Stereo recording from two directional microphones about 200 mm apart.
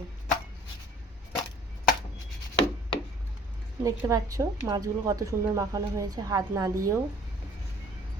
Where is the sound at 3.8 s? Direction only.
15° right (ahead or behind).